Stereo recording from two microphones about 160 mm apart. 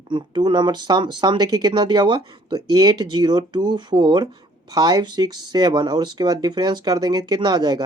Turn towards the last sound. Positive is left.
turn(degrees=-25)  # may be behind; listen again after turning